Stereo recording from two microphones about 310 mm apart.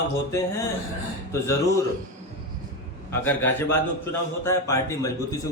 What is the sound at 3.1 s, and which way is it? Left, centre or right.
A man's voice, centre.